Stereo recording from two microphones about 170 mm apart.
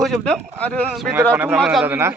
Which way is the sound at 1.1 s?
10° right (ahead or behind).